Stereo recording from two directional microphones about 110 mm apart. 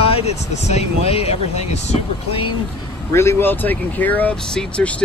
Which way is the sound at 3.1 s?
25° left (ahead or behind).